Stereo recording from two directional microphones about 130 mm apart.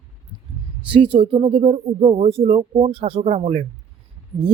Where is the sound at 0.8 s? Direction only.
40° right (ahead or behind); by 3.7 s 55° right (ahead or behind).